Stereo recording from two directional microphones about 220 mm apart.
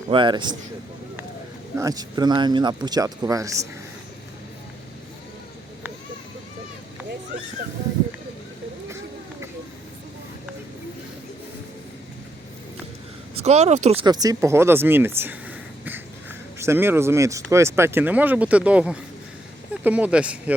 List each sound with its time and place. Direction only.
0.1 s a man's voice: 20° right (ahead or behind)
1.7 s speech: 15° right (ahead or behind)
13.3 s speech: 30° right (ahead or behind); by 20.4 s 5° right (ahead or behind)